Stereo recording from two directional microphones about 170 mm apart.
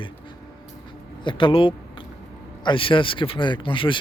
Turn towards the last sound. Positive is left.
turn(degrees=30)  # may be behind; listen again after turning